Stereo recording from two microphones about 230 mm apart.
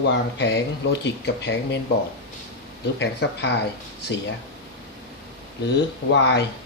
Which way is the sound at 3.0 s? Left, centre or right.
Left.